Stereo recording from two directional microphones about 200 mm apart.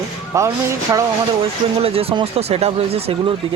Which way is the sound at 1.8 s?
30° right (ahead or behind).